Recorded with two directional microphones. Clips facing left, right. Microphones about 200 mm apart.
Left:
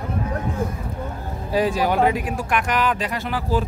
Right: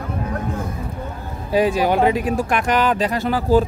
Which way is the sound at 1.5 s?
20° right (ahead or behind).